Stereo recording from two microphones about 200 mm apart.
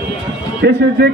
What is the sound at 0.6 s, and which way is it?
Speech, 60° right (ahead or behind).